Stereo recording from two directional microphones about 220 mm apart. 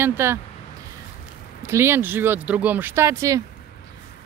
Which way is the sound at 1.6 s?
10° right (ahead or behind).